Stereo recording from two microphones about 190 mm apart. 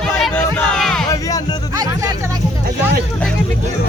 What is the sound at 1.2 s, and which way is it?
Speech, 20° left (ahead or behind).